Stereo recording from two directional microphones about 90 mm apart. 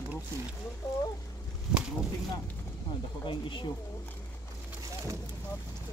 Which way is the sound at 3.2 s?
65° left (ahead or behind).